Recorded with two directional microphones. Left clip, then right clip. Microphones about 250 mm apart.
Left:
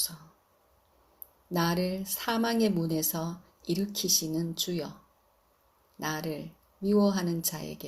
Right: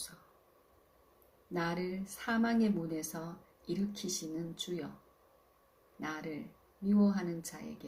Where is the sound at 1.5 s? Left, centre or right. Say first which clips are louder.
Left 7 dB; left.